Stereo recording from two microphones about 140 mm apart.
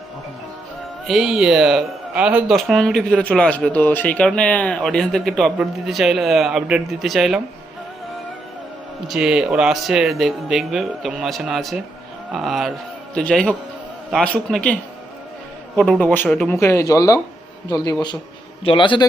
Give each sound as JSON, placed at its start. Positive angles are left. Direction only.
{"t": 1.0, "sound": "speech", "side_deg": 0}
{"t": 9.0, "sound": "a man's voice", "side_deg": -5}